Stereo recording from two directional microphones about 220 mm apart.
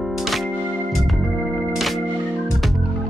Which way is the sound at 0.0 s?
Centre (ahead or behind).